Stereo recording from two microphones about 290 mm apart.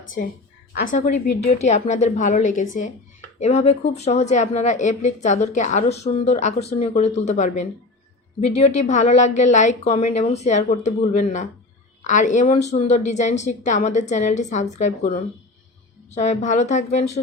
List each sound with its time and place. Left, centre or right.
0.7 s a woman's voice: left